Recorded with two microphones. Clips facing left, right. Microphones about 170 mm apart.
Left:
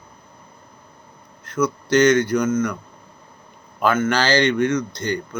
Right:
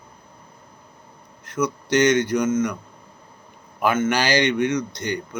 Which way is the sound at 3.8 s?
20° right (ahead or behind).